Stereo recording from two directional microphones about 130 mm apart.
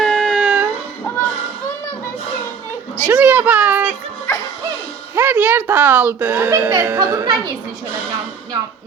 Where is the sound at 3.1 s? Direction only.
15° right (ahead or behind).